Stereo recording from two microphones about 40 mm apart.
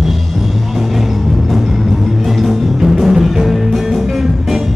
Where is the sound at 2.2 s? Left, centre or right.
Centre.